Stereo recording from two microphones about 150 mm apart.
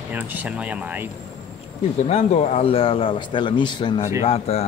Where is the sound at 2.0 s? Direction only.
45° left (ahead or behind); by 4.1 s 30° left (ahead or behind).